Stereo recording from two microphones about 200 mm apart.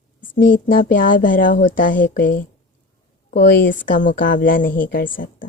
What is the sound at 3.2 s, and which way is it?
Speech, 40° left (ahead or behind).